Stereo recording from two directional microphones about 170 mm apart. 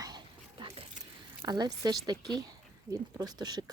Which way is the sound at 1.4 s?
25° right (ahead or behind).